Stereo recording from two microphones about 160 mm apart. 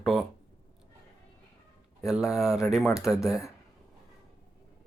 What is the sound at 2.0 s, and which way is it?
Speech, 5° right (ahead or behind).